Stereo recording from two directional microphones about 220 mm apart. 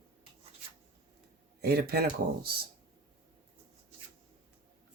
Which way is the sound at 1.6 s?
45° right (ahead or behind).